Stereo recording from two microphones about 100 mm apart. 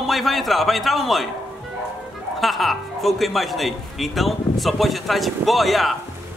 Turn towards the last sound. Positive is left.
turn(degrees=0)  # may be behind; listen again after turning